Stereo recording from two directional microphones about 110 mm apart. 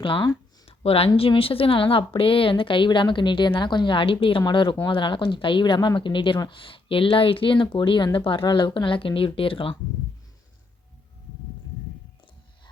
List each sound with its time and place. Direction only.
0.0 s speech: 50° left (ahead or behind)